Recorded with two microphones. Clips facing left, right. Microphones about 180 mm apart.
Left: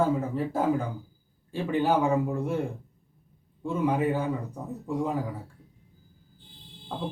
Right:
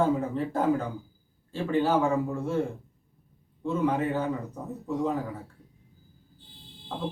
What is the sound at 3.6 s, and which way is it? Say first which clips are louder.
Speech: even; 10° left (ahead or behind).